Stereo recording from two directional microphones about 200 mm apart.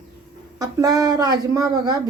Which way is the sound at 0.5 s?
20° right (ahead or behind).